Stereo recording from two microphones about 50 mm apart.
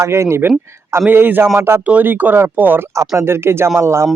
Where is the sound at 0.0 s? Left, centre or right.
Right.